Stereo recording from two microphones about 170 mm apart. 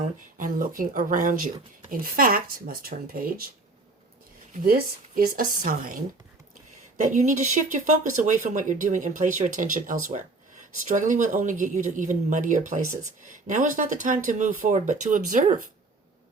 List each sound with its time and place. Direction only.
0.3 s speech: 50° right (ahead or behind)
4.5 s speech: 55° right (ahead or behind)